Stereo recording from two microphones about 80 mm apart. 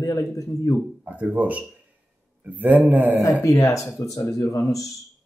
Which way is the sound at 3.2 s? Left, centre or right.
Left.